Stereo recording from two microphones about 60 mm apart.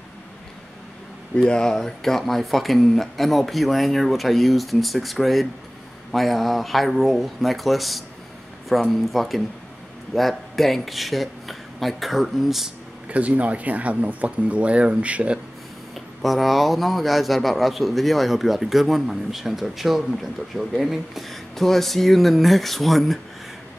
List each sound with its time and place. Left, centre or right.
1.3 s speech: centre
13.1 s speech: right
15.9 s speech: centre